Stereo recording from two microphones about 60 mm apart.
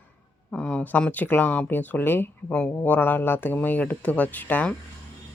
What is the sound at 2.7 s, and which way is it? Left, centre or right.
Speech, left.